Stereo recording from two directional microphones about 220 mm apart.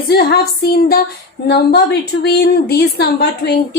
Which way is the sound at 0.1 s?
45° left (ahead or behind).